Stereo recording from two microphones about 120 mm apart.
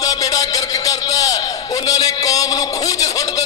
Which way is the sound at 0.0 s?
30° left (ahead or behind).